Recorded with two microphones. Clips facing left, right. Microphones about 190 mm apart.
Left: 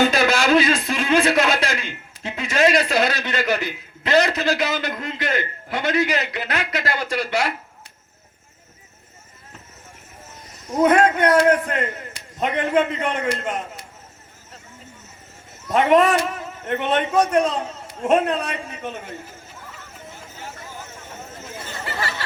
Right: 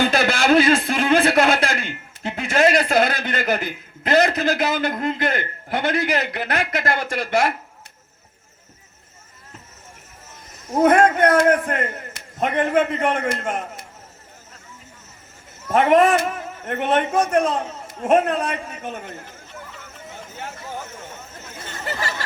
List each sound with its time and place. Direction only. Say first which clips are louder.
0.0 s a sound: left 1 dB; 55° right (ahead or behind)
10.8 s a man's voice: right 1 dB; 50° right (ahead or behind)
15.7 s a man's voice: right 1 dB; 50° right (ahead or behind)